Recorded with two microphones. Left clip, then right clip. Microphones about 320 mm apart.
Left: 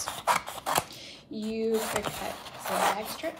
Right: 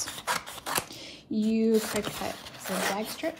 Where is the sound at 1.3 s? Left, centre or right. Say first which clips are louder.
Right 7 dB; centre.